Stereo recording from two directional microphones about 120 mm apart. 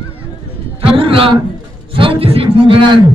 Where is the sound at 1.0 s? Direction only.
50° right (ahead or behind).